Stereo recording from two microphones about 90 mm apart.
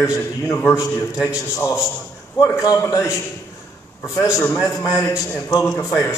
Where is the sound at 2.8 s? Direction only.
30° left (ahead or behind).